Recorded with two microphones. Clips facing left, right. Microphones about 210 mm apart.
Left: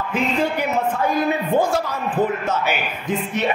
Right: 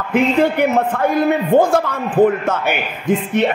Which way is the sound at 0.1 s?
60° right (ahead or behind).